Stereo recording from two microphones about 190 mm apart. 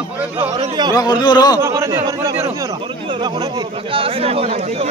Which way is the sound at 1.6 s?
15° right (ahead or behind).